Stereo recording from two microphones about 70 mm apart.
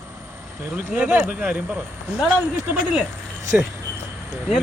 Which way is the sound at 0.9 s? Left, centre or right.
Right.